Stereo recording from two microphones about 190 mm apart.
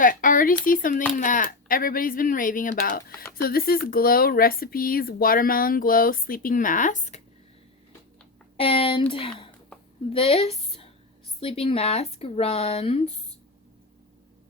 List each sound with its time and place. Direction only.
0.0 s a sound: 45° left (ahead or behind)
0.6 s speech: 45° left (ahead or behind)
8.5 s a woman's voice: 30° left (ahead or behind)